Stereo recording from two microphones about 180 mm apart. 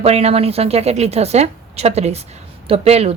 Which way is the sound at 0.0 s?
35° right (ahead or behind).